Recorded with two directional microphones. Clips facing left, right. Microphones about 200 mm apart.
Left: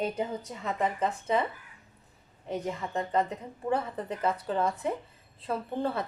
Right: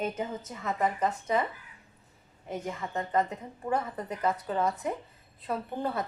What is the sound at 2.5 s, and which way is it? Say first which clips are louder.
A woman's voice: left 2 dB; 30° left (ahead or behind).